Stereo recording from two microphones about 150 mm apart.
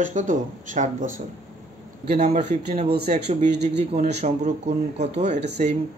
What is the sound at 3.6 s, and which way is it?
Speech, 45° right (ahead or behind).